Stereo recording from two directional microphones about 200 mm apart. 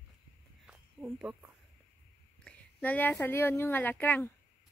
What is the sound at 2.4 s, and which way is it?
A woman's voice, 10° left (ahead or behind).